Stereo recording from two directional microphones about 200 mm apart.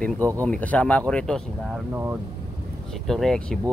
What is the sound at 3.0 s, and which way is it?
Speech, centre (ahead or behind).